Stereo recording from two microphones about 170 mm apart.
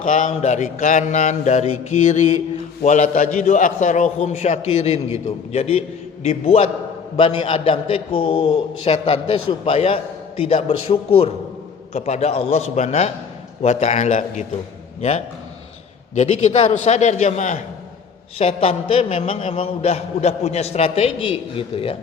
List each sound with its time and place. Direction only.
0.0 s mantra: 50° left (ahead or behind)
5.5 s a man's voice: 35° left (ahead or behind)
16.1 s a man's voice: 40° left (ahead or behind)